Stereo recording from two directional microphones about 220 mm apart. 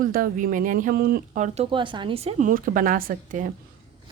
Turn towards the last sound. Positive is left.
turn(degrees=-40)  # may be behind; listen again after turning